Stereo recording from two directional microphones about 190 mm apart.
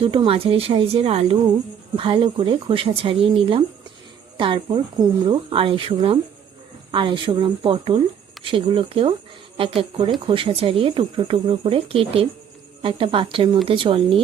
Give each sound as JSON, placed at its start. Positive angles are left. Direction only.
{"t": 0.0, "sound": "speech", "side_deg": -25}